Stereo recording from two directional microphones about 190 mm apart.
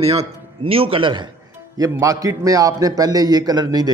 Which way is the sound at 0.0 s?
30° right (ahead or behind).